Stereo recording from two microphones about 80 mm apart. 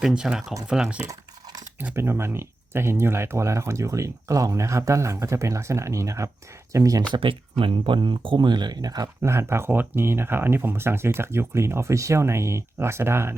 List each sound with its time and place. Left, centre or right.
0.0 s speech: centre
2.0 s speech: right
7.1 s speech: right
9.2 s speech: right